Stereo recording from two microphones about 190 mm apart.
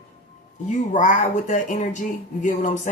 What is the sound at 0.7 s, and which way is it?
Speech, 40° left (ahead or behind).